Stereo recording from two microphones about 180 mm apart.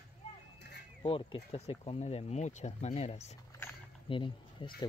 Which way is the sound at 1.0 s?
30° left (ahead or behind).